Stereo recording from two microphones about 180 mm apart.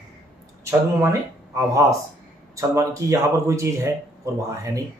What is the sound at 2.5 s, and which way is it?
Speech, 15° right (ahead or behind).